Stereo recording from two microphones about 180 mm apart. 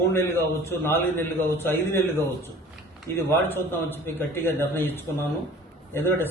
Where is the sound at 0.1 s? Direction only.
15° left (ahead or behind).